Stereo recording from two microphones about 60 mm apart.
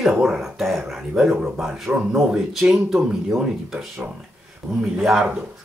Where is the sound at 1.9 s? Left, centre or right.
Right.